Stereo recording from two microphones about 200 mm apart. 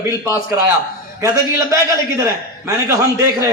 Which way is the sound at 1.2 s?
15° right (ahead or behind).